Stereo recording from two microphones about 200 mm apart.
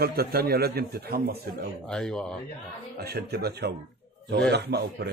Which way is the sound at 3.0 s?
55° right (ahead or behind).